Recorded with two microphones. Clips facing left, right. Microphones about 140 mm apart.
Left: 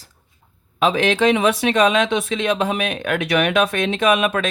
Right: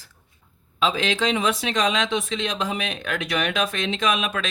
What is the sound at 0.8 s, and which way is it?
Speech, 60° left (ahead or behind).